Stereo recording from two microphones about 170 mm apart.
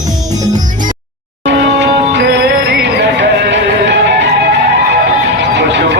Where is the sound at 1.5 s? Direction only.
90° right.